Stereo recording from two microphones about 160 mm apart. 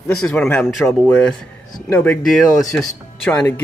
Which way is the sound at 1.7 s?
25° left (ahead or behind).